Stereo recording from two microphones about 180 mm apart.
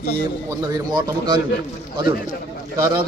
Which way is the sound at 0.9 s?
25° right (ahead or behind).